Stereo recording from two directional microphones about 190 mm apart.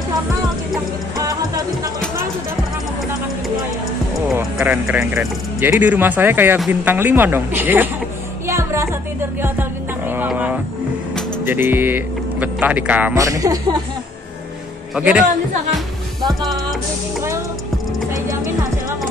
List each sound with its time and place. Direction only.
4.4 s speech: 10° right (ahead or behind)
8.5 s music: 15° right (ahead or behind)
11.4 s speech: 10° right (ahead or behind)
15.0 s speech: 5° right (ahead or behind)
16.2 s music: centre (ahead or behind)
18.3 s music: 15° right (ahead or behind)